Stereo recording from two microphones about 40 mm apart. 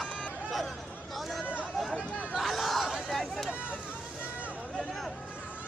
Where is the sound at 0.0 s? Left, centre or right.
Centre.